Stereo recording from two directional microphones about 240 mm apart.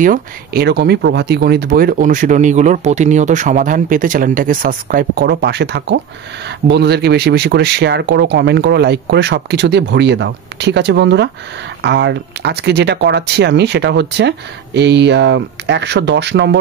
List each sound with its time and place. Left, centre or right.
0.0 s speech: right